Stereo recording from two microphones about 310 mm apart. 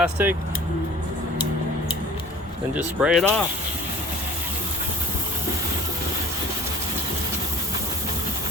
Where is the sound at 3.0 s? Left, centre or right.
Centre.